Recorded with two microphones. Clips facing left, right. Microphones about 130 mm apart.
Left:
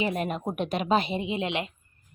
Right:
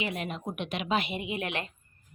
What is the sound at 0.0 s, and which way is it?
Speech, 45° left (ahead or behind).